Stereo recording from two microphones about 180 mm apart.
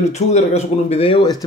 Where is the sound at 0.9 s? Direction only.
35° left (ahead or behind).